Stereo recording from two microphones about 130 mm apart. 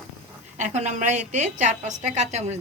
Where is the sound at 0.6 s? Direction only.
65° right (ahead or behind).